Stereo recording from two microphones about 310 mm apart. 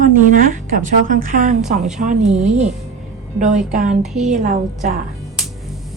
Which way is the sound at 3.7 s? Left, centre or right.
Right.